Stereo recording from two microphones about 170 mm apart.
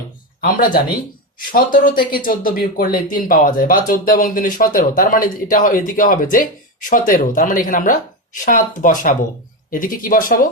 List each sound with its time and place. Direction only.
0.4 s speech: 55° left (ahead or behind)